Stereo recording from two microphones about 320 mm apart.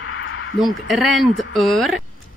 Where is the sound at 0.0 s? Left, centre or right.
Left.